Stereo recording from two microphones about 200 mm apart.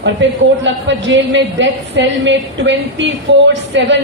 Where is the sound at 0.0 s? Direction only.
65° right (ahead or behind).